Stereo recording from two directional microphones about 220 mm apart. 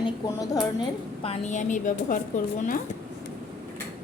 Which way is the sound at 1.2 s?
30° left (ahead or behind).